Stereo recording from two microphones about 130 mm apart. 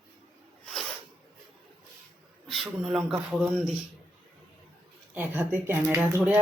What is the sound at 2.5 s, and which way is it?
Speech, centre (ahead or behind).